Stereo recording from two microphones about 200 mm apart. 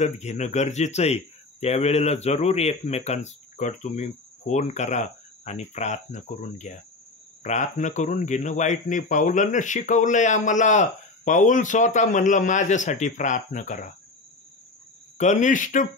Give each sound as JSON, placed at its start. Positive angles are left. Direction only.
{"t": 0.0, "sound": "speech", "side_deg": 35}
{"t": 15.1, "sound": "speech", "side_deg": 35}